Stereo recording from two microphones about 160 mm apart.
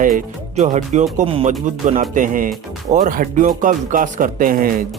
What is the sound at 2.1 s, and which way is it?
Speech, 55° right (ahead or behind).